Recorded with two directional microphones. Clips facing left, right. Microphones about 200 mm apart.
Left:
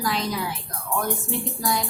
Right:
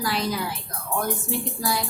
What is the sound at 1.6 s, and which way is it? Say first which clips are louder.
Speech: left 2 dB; 5° right (ahead or behind).